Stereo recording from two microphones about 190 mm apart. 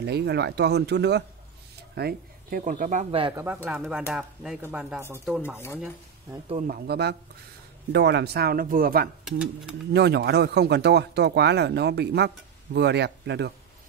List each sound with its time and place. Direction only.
0.0 s speech: 60° right (ahead or behind); by 3.3 s 30° right (ahead or behind)
3.3 s speech: 10° right (ahead or behind)
5.4 s speech: 10° left (ahead or behind)
6.7 s speech: 60° right (ahead or behind)
9.9 s speech: 60° right (ahead or behind)